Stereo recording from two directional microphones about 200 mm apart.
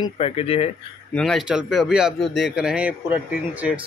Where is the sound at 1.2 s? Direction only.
Centre (ahead or behind).